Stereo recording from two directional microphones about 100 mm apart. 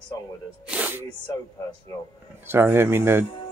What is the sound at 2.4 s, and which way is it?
Speech, 20° right (ahead or behind).